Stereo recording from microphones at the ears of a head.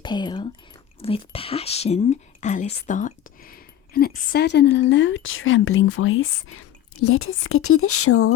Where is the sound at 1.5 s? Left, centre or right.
Left.